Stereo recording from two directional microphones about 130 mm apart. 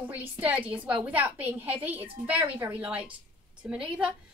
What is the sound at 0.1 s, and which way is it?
A woman's voice, 10° right (ahead or behind).